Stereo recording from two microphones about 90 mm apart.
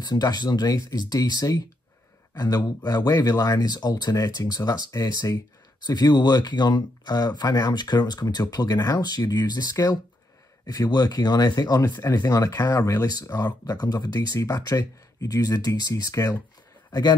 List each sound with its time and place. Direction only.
0.0 s speech: 50° left (ahead or behind)